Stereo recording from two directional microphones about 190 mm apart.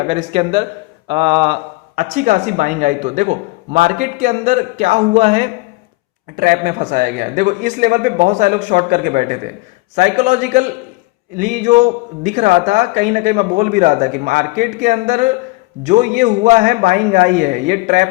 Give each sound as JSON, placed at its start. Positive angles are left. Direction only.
{"t": 0.1, "sound": "speech", "side_deg": -35}
{"t": 2.0, "sound": "a man's voice", "side_deg": -45}
{"t": 6.3, "sound": "a man's voice", "side_deg": -50}